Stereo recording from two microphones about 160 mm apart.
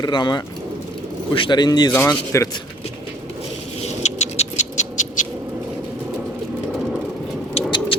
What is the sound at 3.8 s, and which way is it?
Rodents, 45° left (ahead or behind).